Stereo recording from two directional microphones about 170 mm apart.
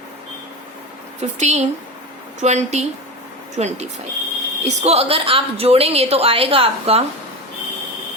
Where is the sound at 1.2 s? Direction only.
40° right (ahead or behind).